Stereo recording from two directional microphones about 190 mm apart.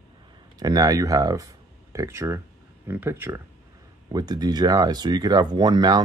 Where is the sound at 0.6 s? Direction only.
20° right (ahead or behind).